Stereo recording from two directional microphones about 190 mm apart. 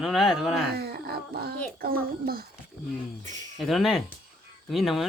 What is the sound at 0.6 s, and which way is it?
Groan, 55° right (ahead or behind).